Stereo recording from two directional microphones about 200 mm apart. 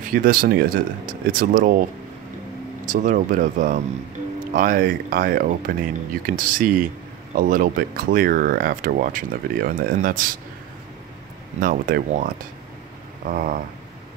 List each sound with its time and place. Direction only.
0.0 s speech: 45° right (ahead or behind)
2.8 s speech: 40° right (ahead or behind)
11.6 s speech: 45° right (ahead or behind)
13.3 s speech: 45° right (ahead or behind)